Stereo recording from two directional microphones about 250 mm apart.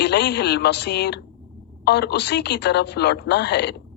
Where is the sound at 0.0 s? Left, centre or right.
Left.